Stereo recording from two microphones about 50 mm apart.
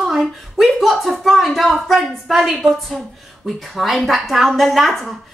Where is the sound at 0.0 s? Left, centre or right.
Centre.